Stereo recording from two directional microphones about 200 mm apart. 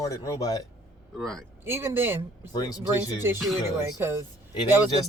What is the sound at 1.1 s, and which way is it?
Speech, centre (ahead or behind).